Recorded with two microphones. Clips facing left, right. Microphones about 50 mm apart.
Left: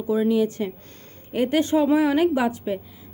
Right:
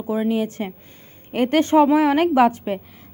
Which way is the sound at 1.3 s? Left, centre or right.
Right.